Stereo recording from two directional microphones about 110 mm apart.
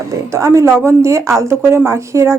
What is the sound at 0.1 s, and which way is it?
Speech, 30° right (ahead or behind).